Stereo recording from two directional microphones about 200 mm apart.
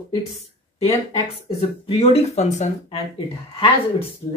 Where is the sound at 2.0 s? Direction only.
30° left (ahead or behind).